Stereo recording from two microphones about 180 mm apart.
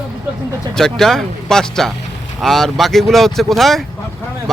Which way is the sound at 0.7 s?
5° left (ahead or behind).